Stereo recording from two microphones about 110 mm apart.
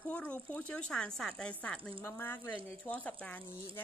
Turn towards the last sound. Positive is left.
turn(degrees=15)  # may be behind; listen again after turning